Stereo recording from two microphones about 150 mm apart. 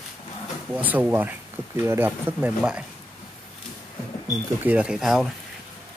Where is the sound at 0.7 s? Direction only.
10° right (ahead or behind).